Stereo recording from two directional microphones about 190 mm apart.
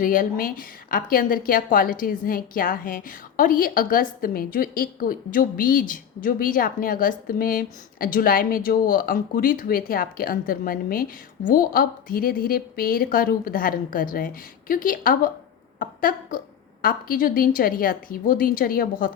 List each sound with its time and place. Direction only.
0.0 s a woman's voice: 45° left (ahead or behind)
15.8 s a sound: 45° left (ahead or behind)
16.8 s a woman's voice: 50° left (ahead or behind)